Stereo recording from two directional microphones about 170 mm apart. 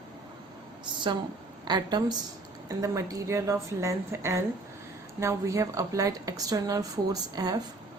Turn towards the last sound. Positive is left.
turn(degrees=-25)  # may be behind; listen again after turning